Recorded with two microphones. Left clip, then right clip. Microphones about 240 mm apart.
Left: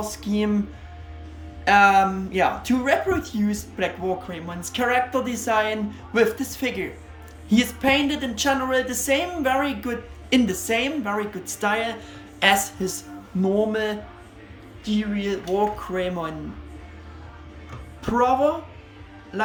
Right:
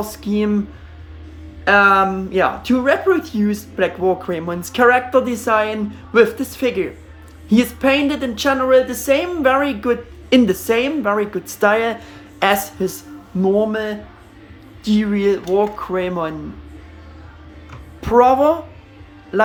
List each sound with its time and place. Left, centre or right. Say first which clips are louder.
0.0 s a woman's voice: right 5 dB; centre
1.6 s a woman's voice: right 4 dB; centre
14.8 s a woman's voice: right 9 dB; right
15.5 s a woman's voice: right 5 dB; centre
18.0 s a woman's voice: right 8 dB; centre